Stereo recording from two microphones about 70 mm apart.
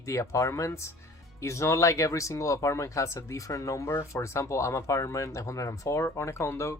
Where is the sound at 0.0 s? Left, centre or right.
Left.